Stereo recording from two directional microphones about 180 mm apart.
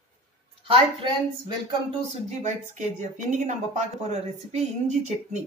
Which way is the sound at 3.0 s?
45° right (ahead or behind).